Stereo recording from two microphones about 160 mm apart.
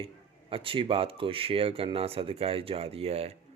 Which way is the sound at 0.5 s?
35° right (ahead or behind).